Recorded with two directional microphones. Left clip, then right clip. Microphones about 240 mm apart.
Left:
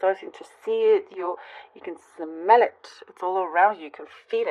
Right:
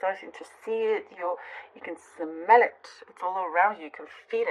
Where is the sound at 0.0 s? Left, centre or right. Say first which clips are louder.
Left 6 dB; left.